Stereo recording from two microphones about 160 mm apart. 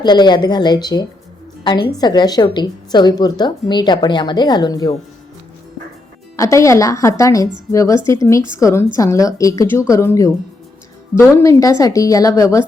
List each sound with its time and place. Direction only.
0.0 s a woman's voice: 25° left (ahead or behind)
6.3 s a woman's voice: 20° left (ahead or behind)